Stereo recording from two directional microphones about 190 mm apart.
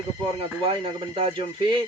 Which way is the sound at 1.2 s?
30° right (ahead or behind).